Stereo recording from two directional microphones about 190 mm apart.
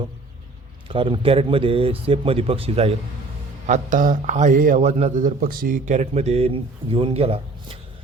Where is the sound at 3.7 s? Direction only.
40° right (ahead or behind).